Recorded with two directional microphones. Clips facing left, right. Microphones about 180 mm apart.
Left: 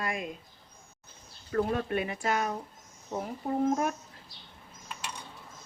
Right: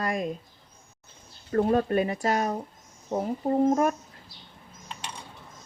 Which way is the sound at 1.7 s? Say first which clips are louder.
Right 7 dB; 40° right (ahead or behind).